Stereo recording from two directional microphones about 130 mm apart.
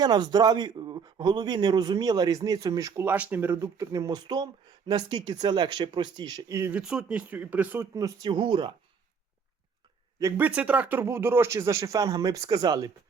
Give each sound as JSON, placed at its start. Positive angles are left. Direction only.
{"t": 0.0, "sound": "a man's voice", "side_deg": -30}
{"t": 6.7, "sound": "speech", "side_deg": -10}
{"t": 7.9, "sound": "a man's voice", "side_deg": -30}
{"t": 10.3, "sound": "speech", "side_deg": -10}